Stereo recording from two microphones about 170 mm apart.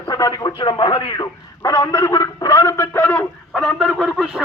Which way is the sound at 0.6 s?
25° left (ahead or behind).